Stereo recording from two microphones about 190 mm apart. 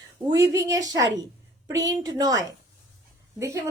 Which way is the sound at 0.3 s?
20° right (ahead or behind).